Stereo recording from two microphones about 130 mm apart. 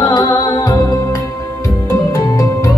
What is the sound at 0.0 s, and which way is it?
Music, 30° left (ahead or behind).